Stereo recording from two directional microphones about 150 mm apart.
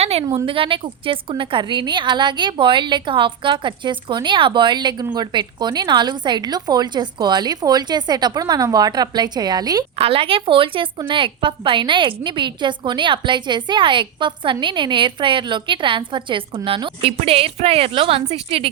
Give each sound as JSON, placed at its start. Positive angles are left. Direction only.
{"t": 0.0, "sound": "a woman's voice", "side_deg": -40}
{"t": 10.0, "sound": "a woman's voice", "side_deg": -40}